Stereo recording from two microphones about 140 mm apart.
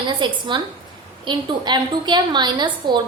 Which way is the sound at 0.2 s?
35° right (ahead or behind).